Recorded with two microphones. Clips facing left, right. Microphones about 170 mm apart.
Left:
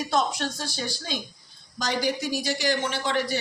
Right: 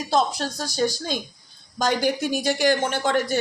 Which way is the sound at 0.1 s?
35° right (ahead or behind).